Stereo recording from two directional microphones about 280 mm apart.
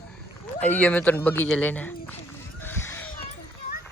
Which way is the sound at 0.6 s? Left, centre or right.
Centre.